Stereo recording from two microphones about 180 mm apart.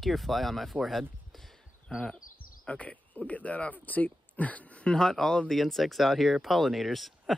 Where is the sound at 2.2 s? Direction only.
50° left (ahead or behind).